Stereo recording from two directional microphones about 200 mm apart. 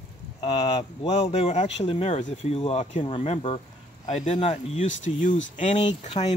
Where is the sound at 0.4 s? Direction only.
30° left (ahead or behind).